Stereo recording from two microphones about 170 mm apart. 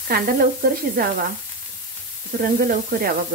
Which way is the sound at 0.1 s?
60° right (ahead or behind).